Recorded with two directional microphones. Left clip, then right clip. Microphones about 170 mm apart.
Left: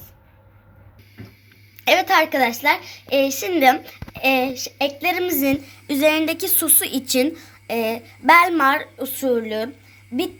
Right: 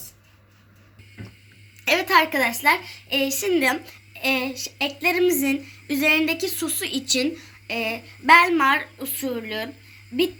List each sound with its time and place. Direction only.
1.8 s a woman's voice: 60° left (ahead or behind)